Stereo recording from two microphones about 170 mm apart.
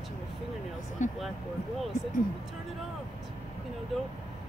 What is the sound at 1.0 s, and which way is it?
Speech, 45° left (ahead or behind).